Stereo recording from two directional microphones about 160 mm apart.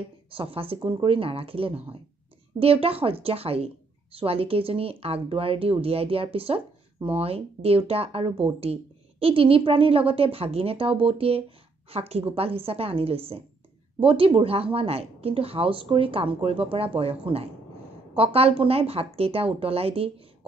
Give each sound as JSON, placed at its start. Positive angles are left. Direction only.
{"t": 0.3, "sound": "a woman's voice", "side_deg": -35}